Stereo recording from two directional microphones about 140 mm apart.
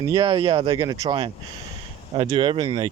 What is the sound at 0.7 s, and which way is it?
Speech, 25° right (ahead or behind).